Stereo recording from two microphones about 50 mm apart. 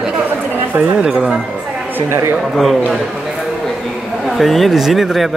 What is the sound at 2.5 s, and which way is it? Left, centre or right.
Speech, centre.